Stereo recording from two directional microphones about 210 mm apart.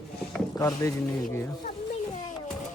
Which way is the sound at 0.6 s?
15° left (ahead or behind).